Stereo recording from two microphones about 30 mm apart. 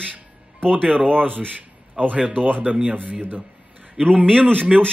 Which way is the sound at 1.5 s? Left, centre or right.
Right.